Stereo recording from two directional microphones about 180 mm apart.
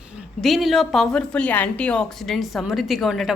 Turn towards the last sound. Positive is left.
turn(degrees=0)  # may be behind; listen again after turning